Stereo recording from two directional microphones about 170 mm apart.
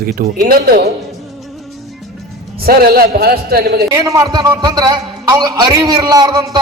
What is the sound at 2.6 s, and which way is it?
A man's voice, 60° right (ahead or behind).